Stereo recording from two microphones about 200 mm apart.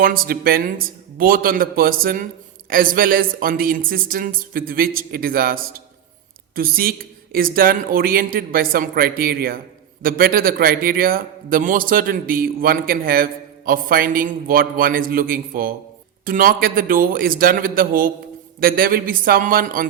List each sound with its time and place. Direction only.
0.0 s a man's voice: 45° right (ahead or behind)